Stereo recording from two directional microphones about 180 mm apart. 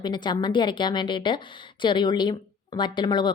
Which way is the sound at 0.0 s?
25° left (ahead or behind).